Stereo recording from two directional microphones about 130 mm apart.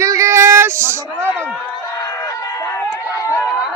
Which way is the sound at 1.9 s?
25° left (ahead or behind).